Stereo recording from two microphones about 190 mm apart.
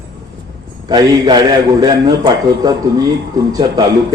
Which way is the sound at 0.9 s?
20° right (ahead or behind).